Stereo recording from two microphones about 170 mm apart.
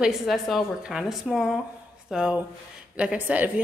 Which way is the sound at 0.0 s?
Centre (ahead or behind).